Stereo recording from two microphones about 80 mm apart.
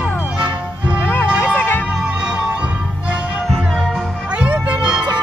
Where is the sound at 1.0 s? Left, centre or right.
Left.